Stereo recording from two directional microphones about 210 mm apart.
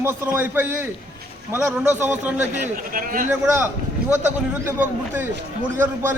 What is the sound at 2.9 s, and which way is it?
Speech, 40° right (ahead or behind).